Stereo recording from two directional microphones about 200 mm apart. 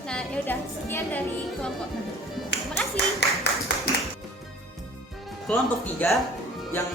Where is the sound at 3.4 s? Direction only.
55° left (ahead or behind).